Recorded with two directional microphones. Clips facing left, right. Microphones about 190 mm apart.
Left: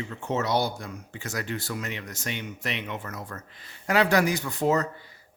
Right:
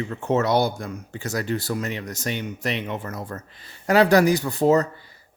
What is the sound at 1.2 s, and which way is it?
Speech, 35° right (ahead or behind).